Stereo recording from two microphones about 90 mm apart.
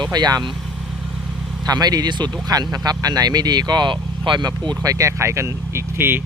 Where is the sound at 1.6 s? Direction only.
45° right (ahead or behind).